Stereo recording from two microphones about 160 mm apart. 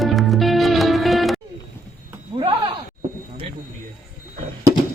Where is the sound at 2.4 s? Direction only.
30° right (ahead or behind).